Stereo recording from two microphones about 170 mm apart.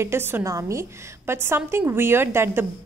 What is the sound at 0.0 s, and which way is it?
A woman's voice, 15° right (ahead or behind).